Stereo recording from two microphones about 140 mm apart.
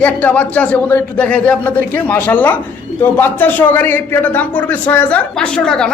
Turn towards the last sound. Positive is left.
turn(degrees=5)  # may be behind; listen again after turning